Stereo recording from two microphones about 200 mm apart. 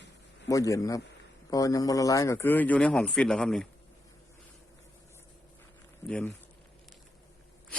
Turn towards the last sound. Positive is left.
turn(degrees=5)  # may be behind; listen again after turning